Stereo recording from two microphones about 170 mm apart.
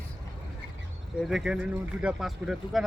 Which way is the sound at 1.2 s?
Centre (ahead or behind).